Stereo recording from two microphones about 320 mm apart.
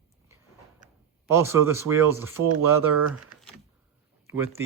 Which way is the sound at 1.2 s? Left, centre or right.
Centre.